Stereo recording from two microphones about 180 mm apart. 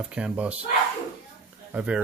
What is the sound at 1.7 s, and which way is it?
Speech, 5° right (ahead or behind).